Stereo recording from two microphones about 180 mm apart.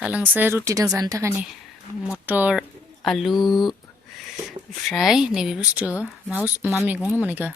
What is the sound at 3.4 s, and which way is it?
Speech, 25° left (ahead or behind).